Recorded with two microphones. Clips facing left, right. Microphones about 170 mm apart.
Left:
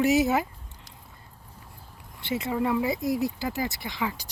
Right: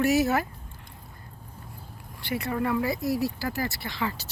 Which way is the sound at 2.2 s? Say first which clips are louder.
Left 1 dB; 20° left (ahead or behind).